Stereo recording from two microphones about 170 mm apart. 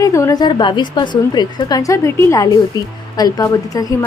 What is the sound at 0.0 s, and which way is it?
A woman's voice, 20° left (ahead or behind).